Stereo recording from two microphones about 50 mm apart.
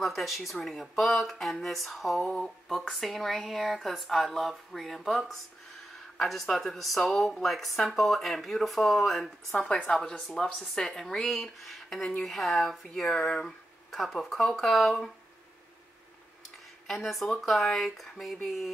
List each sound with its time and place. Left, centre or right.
0.0 s speech: centre
9.5 s a woman's voice: left
9.8 s speech: centre
13.8 s speech: centre
16.8 s speech: centre